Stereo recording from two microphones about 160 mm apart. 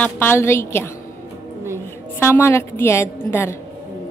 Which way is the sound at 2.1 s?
15° left (ahead or behind).